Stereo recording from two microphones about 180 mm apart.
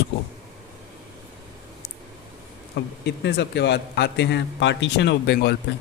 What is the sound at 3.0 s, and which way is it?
A man's voice, 70° left (ahead or behind).